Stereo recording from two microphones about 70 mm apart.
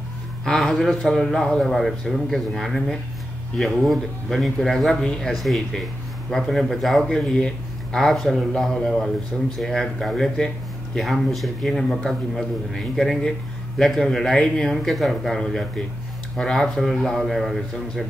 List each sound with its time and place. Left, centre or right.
0.5 s speech: centre